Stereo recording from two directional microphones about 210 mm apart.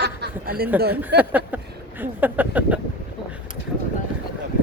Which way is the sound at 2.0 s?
10° right (ahead or behind).